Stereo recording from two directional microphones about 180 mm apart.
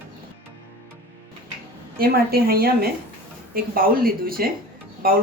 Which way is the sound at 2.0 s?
55° right (ahead or behind).